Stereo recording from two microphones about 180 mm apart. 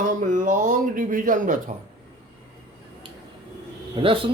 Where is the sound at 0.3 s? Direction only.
45° right (ahead or behind).